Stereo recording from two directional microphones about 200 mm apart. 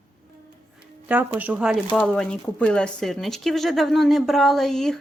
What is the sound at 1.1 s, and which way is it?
Speech, 5° right (ahead or behind).